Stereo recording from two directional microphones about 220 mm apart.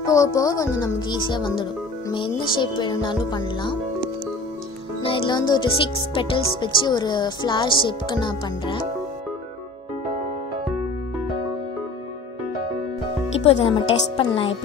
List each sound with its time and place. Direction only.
0.0 s speech: 15° left (ahead or behind)
5.0 s speech: 20° left (ahead or behind)
13.5 s speech: 25° left (ahead or behind)